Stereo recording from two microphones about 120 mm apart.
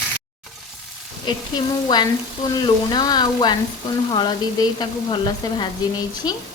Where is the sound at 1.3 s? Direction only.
35° left (ahead or behind).